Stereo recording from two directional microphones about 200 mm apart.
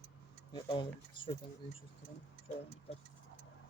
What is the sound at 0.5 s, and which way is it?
Speech, 25° left (ahead or behind).